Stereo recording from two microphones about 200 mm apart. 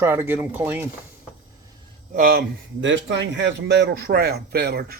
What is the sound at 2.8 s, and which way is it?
Speech, 65° right (ahead or behind).